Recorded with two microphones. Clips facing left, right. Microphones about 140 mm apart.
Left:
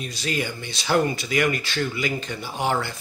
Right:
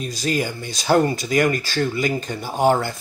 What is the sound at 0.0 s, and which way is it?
Speech, 40° right (ahead or behind).